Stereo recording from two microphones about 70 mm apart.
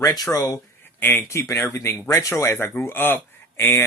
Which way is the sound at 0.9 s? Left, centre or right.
Left.